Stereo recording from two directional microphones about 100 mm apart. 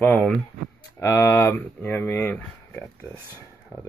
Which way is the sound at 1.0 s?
25° left (ahead or behind).